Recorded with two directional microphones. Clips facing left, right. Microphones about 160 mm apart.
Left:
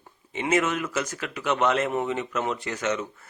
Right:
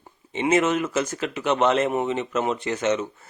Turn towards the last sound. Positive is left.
turn(degrees=-25)  # may be behind; listen again after turning